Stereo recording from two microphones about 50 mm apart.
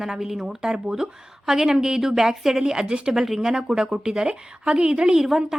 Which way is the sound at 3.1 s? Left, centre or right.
Centre.